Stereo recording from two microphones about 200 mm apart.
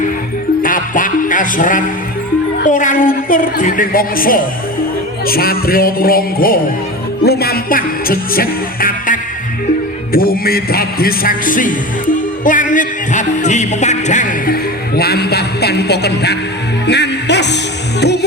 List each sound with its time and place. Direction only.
0.6 s music: 40° left (ahead or behind)